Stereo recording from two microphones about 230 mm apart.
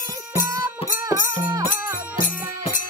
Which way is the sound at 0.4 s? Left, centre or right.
Left.